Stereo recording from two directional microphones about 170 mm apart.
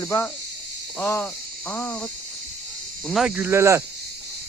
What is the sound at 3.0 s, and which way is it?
Speech, centre (ahead or behind).